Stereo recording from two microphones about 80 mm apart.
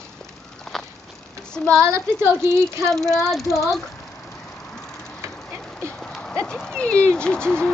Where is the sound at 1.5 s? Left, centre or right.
Centre.